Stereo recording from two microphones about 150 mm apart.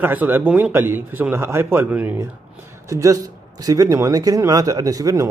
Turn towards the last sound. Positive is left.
turn(degrees=-20)  # may be behind; listen again after turning